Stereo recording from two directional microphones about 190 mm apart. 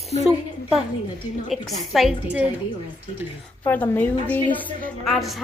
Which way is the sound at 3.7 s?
10° left (ahead or behind).